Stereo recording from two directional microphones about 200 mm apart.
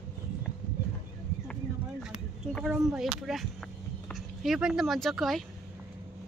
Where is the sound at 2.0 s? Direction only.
Centre (ahead or behind).